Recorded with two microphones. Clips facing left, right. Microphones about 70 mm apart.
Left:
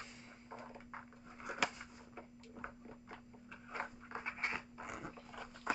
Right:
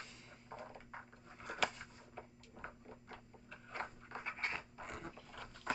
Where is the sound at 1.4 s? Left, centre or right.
Centre.